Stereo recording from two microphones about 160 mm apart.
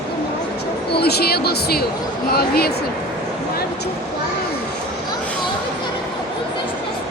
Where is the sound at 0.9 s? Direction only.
85° left.